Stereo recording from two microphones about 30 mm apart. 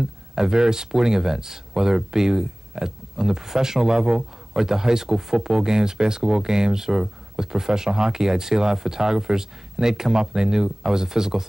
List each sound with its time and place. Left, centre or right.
0.4 s speech: right